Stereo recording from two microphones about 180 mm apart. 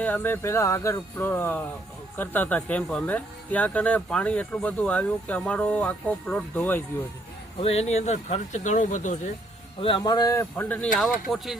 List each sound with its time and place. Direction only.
0.0 s speech: 10° left (ahead or behind)
7.6 s speech: 35° left (ahead or behind)
9.8 s speech: 25° left (ahead or behind); by 10.8 s 10° left (ahead or behind)
10.9 s speech: centre (ahead or behind)